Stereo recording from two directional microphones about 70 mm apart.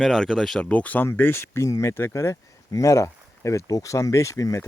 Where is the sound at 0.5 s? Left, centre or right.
Centre.